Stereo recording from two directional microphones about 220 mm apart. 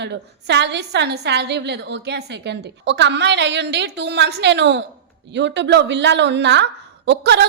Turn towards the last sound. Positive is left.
turn(degrees=-50)  # may be behind; listen again after turning